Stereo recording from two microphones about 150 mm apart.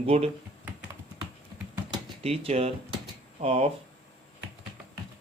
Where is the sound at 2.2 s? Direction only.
40° right (ahead or behind).